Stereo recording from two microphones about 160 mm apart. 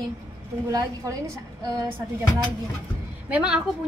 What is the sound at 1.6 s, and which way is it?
Speech, 25° right (ahead or behind).